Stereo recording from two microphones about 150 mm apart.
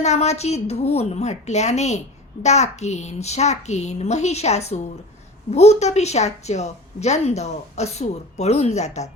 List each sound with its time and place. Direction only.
0.0 s a woman's voice: 45° left (ahead or behind)